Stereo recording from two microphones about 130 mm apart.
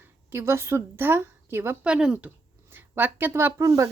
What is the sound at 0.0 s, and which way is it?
Speech, 15° right (ahead or behind).